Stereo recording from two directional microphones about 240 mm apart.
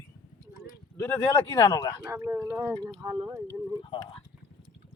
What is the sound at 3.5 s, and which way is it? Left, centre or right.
Speech, centre.